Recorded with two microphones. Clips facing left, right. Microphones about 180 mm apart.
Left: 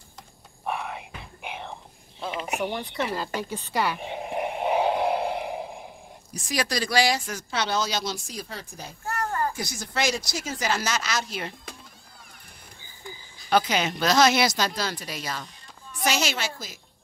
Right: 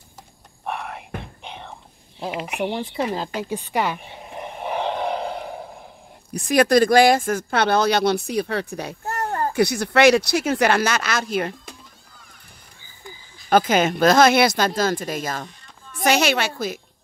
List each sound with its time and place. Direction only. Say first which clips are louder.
0.7 s whispering: right 1 dB; centre (ahead or behind)
1.4 s whispering: left 1 dB; 10° left (ahead or behind)
2.1 s speech: right 4 dB; 35° right (ahead or behind)
2.6 s speech: right 6 dB; 20° right (ahead or behind)
4.1 s a sound: left 5 dB; 20° left (ahead or behind)
6.3 s speech: right 12 dB; 55° right (ahead or behind)
9.0 s a sound: right 2 dB; 35° right (ahead or behind)
9.5 s speech: right 14 dB; 65° right (ahead or behind)
13.5 s speech: right 6 dB; 50° right (ahead or behind)